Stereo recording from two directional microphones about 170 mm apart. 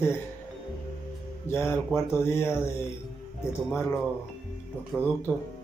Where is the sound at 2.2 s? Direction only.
15° left (ahead or behind).